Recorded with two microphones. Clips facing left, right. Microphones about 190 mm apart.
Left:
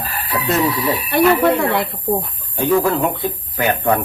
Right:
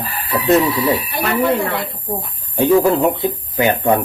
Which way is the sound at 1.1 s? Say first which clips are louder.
Left 9 dB; 65° left (ahead or behind).